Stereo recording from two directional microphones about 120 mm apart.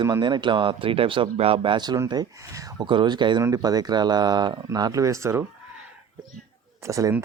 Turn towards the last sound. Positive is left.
turn(degrees=-25)  # may be behind; listen again after turning